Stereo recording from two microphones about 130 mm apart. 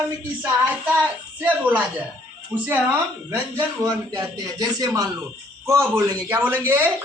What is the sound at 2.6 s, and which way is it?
Speech, 15° right (ahead or behind).